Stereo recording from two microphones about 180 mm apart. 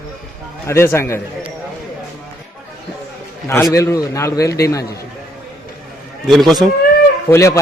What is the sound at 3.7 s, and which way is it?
A man's voice, 20° left (ahead or behind).